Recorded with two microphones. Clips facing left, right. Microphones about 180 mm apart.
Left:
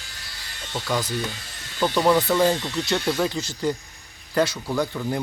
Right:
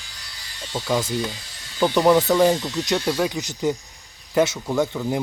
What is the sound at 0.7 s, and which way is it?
Speech, 10° right (ahead or behind).